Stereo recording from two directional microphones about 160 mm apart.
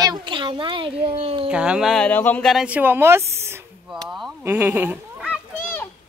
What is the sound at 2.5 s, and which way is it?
A woman's voice, 5° right (ahead or behind).